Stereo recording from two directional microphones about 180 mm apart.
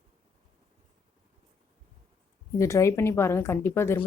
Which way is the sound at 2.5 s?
15° left (ahead or behind).